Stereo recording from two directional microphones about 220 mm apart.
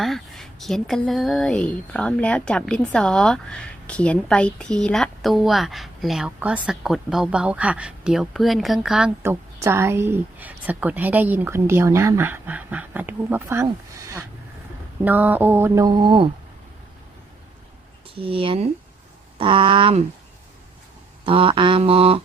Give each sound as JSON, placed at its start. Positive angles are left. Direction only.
{"t": 0.0, "sound": "speech", "side_deg": 0}
{"t": 15.0, "sound": "mantra", "side_deg": -10}
{"t": 18.1, "sound": "mantra", "side_deg": -25}
{"t": 21.2, "sound": "mantra", "side_deg": -25}